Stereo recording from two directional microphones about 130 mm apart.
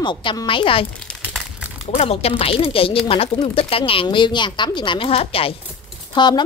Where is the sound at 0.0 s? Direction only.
40° left (ahead or behind).